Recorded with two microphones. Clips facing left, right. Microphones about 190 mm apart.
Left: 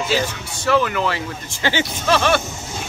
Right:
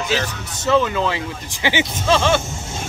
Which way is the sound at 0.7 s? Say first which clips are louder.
Right 1 dB; 20° right (ahead or behind).